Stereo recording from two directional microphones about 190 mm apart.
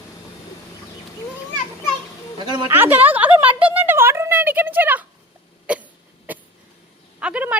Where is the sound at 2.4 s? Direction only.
25° right (ahead or behind).